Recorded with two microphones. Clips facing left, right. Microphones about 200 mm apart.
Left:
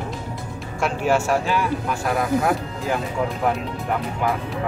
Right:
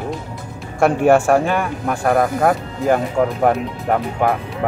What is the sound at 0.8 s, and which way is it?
Speech, 55° right (ahead or behind).